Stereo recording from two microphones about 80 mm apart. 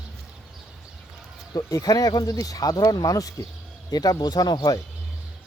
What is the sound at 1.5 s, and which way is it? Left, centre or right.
Speech, left.